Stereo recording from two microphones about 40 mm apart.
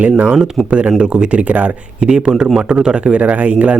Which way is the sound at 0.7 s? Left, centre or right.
Right.